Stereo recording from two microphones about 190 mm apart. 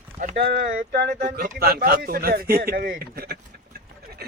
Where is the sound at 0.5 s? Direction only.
55° right (ahead or behind).